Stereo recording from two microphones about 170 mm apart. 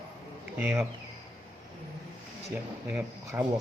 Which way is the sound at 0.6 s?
5° right (ahead or behind).